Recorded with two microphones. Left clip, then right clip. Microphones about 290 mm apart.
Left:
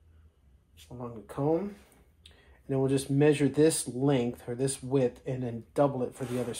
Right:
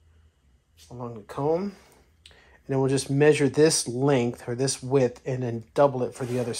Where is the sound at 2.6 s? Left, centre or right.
Right.